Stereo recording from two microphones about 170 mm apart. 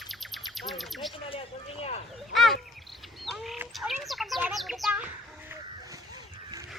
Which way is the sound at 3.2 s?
Centre (ahead or behind).